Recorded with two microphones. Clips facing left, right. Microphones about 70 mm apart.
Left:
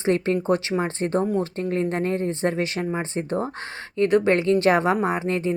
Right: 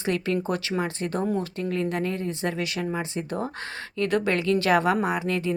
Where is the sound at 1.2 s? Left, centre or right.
Centre.